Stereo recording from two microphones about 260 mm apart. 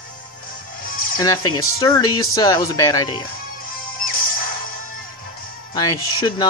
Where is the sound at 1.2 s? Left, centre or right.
Centre.